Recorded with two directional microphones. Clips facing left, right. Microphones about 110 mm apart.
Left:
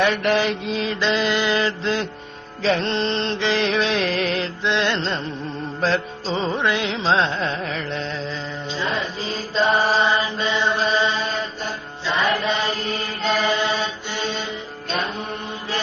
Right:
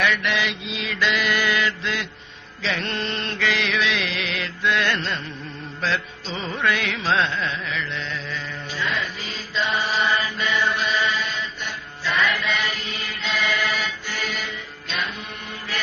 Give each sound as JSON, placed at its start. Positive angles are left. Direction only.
{"t": 0.0, "sound": "music", "side_deg": 40}
{"t": 7.3, "sound": "music", "side_deg": 40}
{"t": 10.0, "sound": "mantra", "side_deg": 25}
{"t": 12.1, "sound": "chant", "side_deg": 30}